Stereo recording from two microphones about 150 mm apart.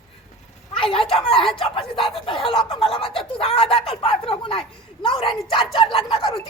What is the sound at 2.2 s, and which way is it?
Snicker, 35° left (ahead or behind).